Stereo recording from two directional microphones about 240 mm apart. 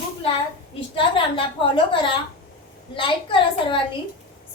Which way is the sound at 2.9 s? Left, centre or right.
Left.